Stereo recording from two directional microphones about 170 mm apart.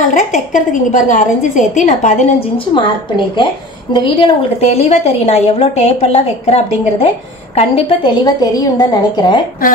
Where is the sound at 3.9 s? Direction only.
35° left (ahead or behind).